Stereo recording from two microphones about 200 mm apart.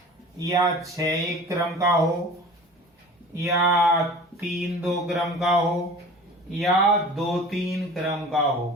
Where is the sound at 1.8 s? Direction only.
Centre (ahead or behind).